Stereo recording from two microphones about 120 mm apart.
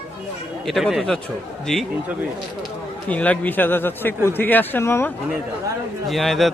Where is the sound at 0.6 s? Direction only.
Centre (ahead or behind).